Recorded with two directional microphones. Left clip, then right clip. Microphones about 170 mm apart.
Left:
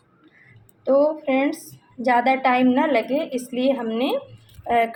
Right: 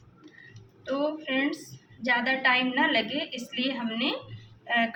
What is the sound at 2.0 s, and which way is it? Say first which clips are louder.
A woman's voice: left 7 dB; 50° left (ahead or behind).